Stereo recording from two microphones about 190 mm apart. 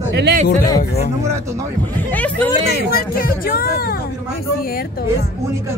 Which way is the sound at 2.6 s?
50° left (ahead or behind).